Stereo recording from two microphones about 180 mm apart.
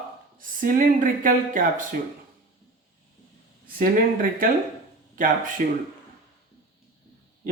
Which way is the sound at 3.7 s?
55° right (ahead or behind).